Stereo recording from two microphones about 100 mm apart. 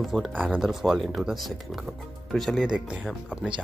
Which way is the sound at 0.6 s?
5° right (ahead or behind).